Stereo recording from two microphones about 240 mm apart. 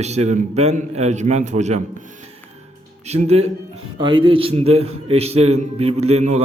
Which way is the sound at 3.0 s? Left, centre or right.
Right.